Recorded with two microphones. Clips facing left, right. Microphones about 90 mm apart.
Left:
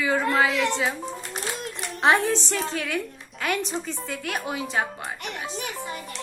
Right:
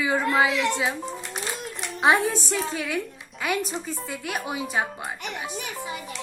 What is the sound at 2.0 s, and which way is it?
A woman's voice, 10° right (ahead or behind).